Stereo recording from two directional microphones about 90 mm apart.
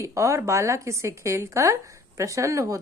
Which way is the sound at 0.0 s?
35° right (ahead or behind).